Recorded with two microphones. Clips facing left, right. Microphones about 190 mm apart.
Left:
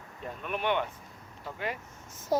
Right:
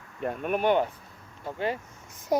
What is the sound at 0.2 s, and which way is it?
Speech, 55° right (ahead or behind).